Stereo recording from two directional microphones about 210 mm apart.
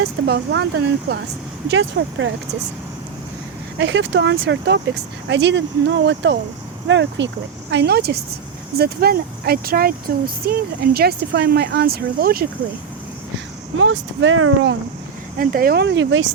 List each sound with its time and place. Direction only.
0.3 s speech: 50° right (ahead or behind)
3.8 s speech: 60° right (ahead or behind)
13.7 s speech: 65° right (ahead or behind)
15.4 s speech: 45° right (ahead or behind); by 16.2 s 60° right (ahead or behind)